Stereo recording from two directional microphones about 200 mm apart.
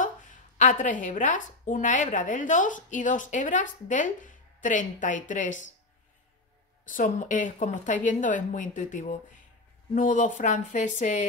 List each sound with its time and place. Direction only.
0.6 s a woman's voice: 40° left (ahead or behind)
6.9 s a woman's voice: 40° left (ahead or behind)